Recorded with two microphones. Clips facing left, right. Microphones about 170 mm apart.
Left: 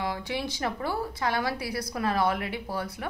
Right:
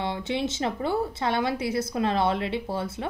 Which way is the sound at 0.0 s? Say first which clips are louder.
Right 3 dB; 25° right (ahead or behind).